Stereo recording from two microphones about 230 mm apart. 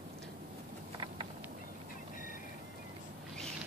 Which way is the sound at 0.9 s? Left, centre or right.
Centre.